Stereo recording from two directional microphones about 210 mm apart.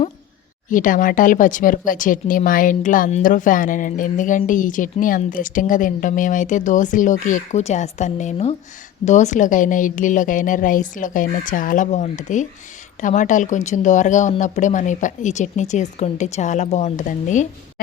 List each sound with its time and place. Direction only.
0.7 s speech: 40° left (ahead or behind)